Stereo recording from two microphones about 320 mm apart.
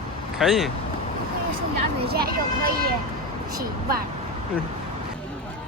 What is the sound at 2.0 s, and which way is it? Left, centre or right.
Speech, right.